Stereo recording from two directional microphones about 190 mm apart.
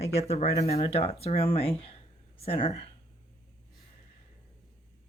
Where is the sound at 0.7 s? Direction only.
30° left (ahead or behind).